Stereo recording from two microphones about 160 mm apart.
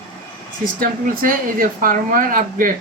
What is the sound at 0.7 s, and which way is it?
Speech, 60° right (ahead or behind).